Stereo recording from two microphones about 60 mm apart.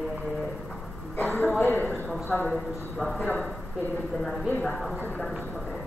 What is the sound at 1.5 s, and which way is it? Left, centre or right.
A man's voice, left.